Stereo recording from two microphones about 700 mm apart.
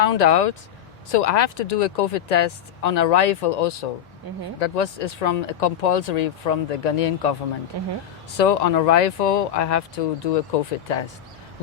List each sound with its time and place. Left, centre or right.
0.0 s speech: left
8.4 s speech: left